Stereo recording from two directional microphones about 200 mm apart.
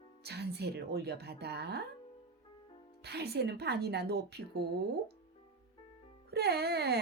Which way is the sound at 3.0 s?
55° right (ahead or behind).